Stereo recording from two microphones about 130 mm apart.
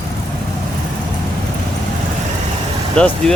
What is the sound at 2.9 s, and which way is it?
Speech, 5° left (ahead or behind).